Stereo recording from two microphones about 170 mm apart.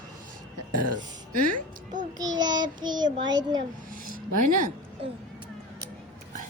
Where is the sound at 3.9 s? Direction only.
55° right (ahead or behind).